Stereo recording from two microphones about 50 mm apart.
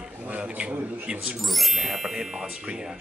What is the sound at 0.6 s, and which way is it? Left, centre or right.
Speech, right.